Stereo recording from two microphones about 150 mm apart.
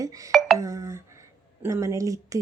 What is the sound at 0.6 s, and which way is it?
A woman's voice, 20° right (ahead or behind).